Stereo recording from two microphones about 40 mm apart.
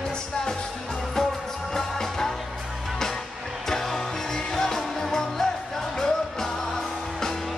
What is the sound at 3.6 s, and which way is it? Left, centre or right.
Music, centre.